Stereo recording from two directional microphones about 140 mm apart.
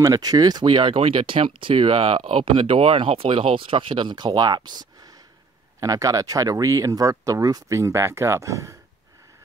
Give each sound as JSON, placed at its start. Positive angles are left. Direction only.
{"t": 0.0, "sound": "speech", "side_deg": -25}